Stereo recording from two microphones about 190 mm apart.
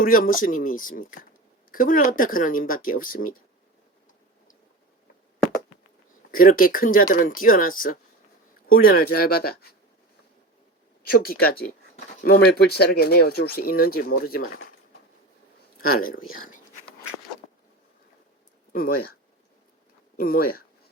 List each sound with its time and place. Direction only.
0.0 s speech: 45° left (ahead or behind)
6.3 s speech: 45° left (ahead or behind)
11.0 s speech: 50° left (ahead or behind)
15.8 s speech: 50° left (ahead or behind)
18.7 s speech: 50° left (ahead or behind)
20.1 s speech: 50° left (ahead or behind)